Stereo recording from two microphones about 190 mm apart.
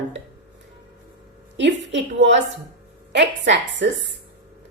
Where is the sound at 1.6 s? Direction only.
70° right (ahead or behind).